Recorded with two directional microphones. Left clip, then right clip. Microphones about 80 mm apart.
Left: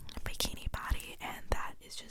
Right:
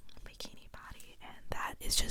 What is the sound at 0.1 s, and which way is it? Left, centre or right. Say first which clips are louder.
Whispering: left 11 dB; left.